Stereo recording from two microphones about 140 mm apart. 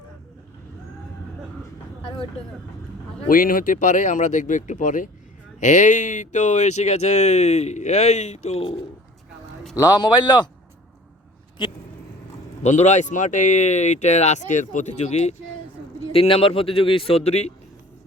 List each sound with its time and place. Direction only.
3.2 s speech: 85° left; by 8.8 s 45° left (ahead or behind)
9.7 s speech: 30° left (ahead or behind)
11.6 s speech: 30° left (ahead or behind)
12.6 s speech: 55° left (ahead or behind)
16.1 s speech: 40° left (ahead or behind)